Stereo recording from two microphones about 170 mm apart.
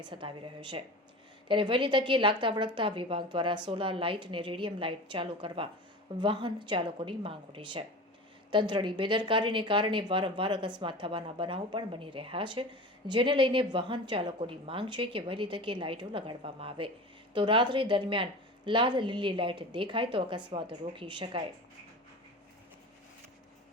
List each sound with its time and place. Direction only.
0.0 s a woman's voice: 30° right (ahead or behind)